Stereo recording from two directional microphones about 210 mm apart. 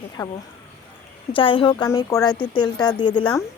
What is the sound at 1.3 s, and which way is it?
Speech, 25° left (ahead or behind).